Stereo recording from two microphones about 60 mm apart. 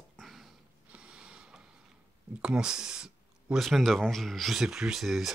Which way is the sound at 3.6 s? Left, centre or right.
Centre.